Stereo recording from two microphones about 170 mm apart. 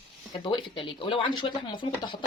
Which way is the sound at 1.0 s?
30° left (ahead or behind).